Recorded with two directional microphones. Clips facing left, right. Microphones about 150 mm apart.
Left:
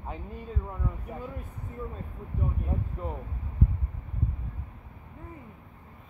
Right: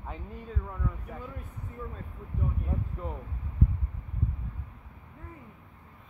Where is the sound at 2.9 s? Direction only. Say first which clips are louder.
Left 2 dB; 15° left (ahead or behind).